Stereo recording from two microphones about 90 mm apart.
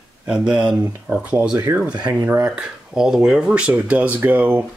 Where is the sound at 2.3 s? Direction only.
30° right (ahead or behind).